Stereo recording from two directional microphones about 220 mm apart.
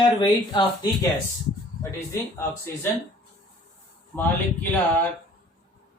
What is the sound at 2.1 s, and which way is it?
Speech, 10° left (ahead or behind).